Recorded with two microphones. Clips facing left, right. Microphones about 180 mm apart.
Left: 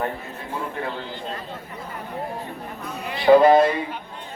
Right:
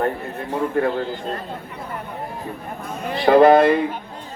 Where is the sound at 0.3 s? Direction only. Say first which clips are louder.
Right 8 dB; 55° right (ahead or behind).